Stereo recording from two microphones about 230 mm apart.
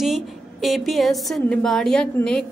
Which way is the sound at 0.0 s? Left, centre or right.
Centre.